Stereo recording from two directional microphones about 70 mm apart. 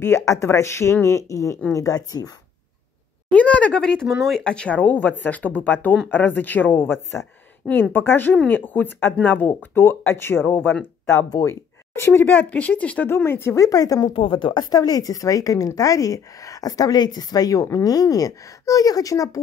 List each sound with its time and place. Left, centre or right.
0.0 s a woman's voice: left
3.3 s speech: centre
11.3 s speech: left
12.4 s speech: centre
13.1 s speech: left
13.7 s a woman's voice: left